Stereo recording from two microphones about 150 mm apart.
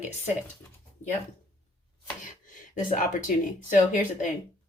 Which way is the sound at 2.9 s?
60° left (ahead or behind).